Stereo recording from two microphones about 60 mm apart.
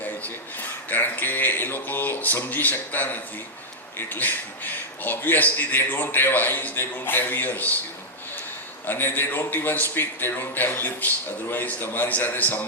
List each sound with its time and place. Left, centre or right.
0.9 s a man's voice: left
8.9 s a man's voice: left